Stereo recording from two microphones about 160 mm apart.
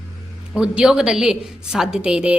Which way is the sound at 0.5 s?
5° right (ahead or behind).